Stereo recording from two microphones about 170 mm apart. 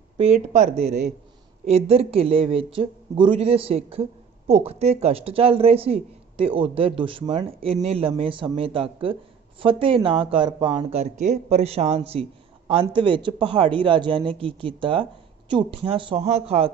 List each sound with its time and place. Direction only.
0.2 s speech: 40° right (ahead or behind)